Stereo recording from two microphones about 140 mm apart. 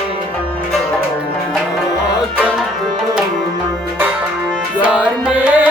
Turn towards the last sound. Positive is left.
turn(degrees=-10)  # may be behind; listen again after turning